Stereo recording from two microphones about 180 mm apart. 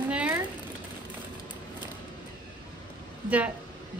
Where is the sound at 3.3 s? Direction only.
10° right (ahead or behind).